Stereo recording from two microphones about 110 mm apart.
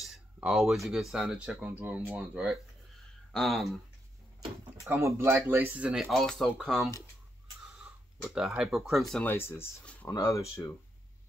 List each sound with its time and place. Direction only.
0.4 s speech: 5° right (ahead or behind)
4.8 s speech: 25° right (ahead or behind)
6.0 s speech: 5° left (ahead or behind)
8.4 s speech: 5° right (ahead or behind)
9.2 s speech: 20° left (ahead or behind)